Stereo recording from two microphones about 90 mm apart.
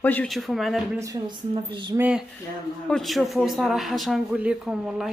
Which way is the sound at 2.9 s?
Centre (ahead or behind).